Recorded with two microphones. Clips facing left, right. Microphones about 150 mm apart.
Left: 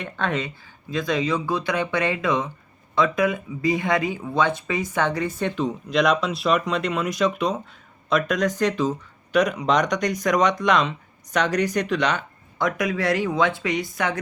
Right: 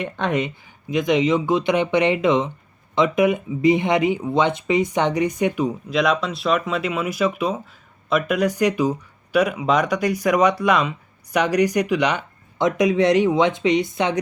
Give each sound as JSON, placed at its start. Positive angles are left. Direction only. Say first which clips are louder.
{"t": 0.0, "sound": "speech", "louder": "right 4 dB", "side_deg": -15}
{"t": 5.9, "sound": "speech", "louder": "left 2 dB", "side_deg": 0}